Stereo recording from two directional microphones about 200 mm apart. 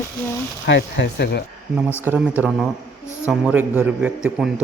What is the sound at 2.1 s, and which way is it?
A man's voice, 5° right (ahead or behind).